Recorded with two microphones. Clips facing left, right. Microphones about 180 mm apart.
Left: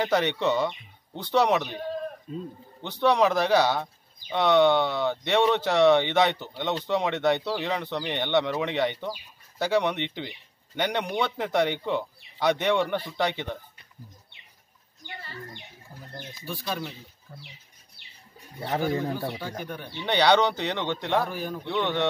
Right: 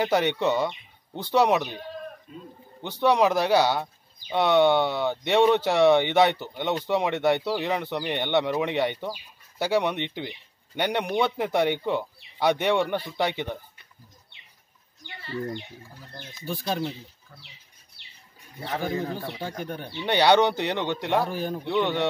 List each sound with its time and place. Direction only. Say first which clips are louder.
0.0 s speech: right 1 dB; 10° right (ahead or behind)
2.3 s speech: left 8 dB; 35° left (ahead or behind)
2.8 s speech: right 1 dB; 10° right (ahead or behind)
15.0 s speech: even; 40° left (ahead or behind)
16.1 s speech: left 4 dB; 10° left (ahead or behind)
16.4 s speech: right 4 dB; 30° right (ahead or behind)
17.3 s speech: left 5 dB; 30° left (ahead or behind)
18.6 s speech: left 2 dB; 35° left (ahead or behind)
20.0 s speech: right 2 dB; 10° right (ahead or behind)
21.2 s speech: right 2 dB; 30° right (ahead or behind)
21.6 s speech: right 2 dB; 10° right (ahead or behind)